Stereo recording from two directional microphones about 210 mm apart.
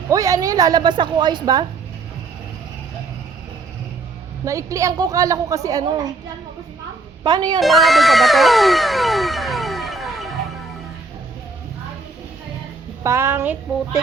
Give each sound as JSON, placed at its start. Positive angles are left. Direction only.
{"t": 0.1, "sound": "a woman's voice", "side_deg": -15}
{"t": 4.4, "sound": "a woman's voice", "side_deg": -15}
{"t": 7.3, "sound": "a woman's voice", "side_deg": -20}
{"t": 7.6, "sound": "a sound", "side_deg": 0}
{"t": 13.0, "sound": "a woman's voice", "side_deg": -15}